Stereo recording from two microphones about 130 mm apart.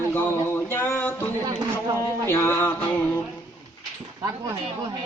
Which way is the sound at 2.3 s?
20° left (ahead or behind).